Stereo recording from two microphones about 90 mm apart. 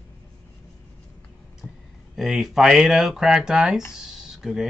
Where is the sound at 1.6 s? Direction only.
25° left (ahead or behind).